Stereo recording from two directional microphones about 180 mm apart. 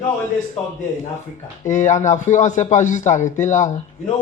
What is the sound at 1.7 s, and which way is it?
Speech, 45° left (ahead or behind).